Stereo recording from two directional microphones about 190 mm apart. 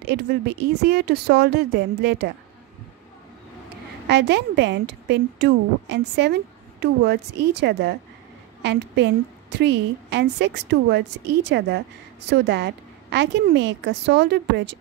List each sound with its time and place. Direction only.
0.0 s a woman's voice: 60° right (ahead or behind)
4.1 s a woman's voice: 65° right (ahead or behind)